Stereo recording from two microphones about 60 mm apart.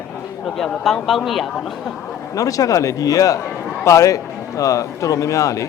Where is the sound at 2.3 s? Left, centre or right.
Left.